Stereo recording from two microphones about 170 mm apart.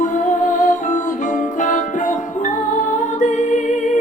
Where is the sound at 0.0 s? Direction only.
50° left (ahead or behind).